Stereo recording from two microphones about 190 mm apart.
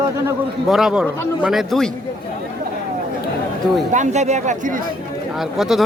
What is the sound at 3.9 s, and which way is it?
Speech, 40° right (ahead or behind).